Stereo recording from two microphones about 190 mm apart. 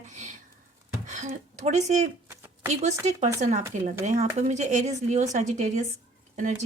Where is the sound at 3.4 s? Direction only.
40° right (ahead or behind).